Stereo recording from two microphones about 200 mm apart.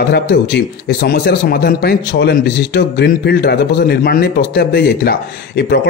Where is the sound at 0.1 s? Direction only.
55° left (ahead or behind).